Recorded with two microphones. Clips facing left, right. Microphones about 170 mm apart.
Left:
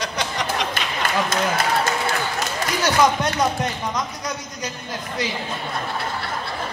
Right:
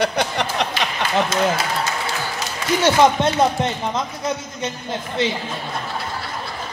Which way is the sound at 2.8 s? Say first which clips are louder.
Right 4 dB; 25° right (ahead or behind).